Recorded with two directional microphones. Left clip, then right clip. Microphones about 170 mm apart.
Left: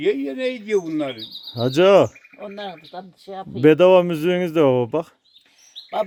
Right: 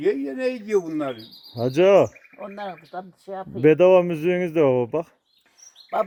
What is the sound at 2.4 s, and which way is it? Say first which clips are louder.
Speech: left 1 dB; 15° right (ahead or behind).